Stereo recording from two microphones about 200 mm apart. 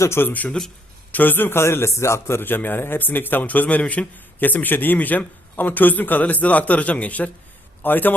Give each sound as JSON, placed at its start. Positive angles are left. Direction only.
{"t": 0.0, "sound": "a man's voice", "side_deg": 10}